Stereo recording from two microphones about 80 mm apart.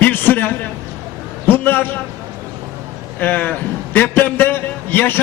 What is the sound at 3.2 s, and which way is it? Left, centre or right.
A man's voice, left.